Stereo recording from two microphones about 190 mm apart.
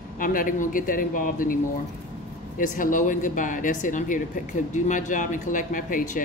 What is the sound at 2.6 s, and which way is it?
Speech, 45° left (ahead or behind).